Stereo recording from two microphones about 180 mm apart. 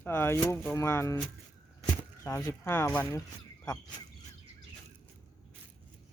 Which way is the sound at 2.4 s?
15° left (ahead or behind).